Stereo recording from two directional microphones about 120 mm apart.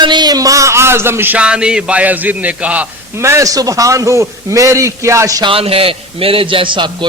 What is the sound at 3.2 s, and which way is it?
A man's voice, 25° right (ahead or behind).